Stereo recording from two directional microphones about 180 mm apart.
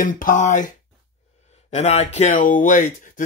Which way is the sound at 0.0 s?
50° left (ahead or behind).